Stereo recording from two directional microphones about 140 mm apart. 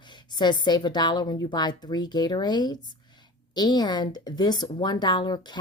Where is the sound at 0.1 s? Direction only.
30° left (ahead or behind).